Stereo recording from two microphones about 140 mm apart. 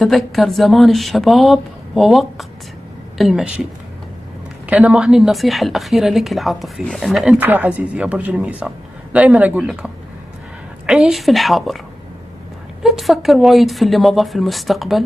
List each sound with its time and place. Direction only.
0.0 s a woman's voice: centre (ahead or behind)
4.6 s a woman's voice: 10° right (ahead or behind)
7.3 s a man's voice: 15° right (ahead or behind)
10.9 s a woman's voice: 5° right (ahead or behind)
12.8 s a woman's voice: centre (ahead or behind)